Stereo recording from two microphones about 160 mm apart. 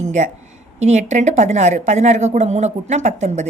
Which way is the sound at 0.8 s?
45° right (ahead or behind).